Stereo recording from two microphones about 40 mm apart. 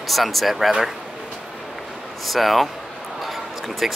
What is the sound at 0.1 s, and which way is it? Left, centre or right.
Speech, centre.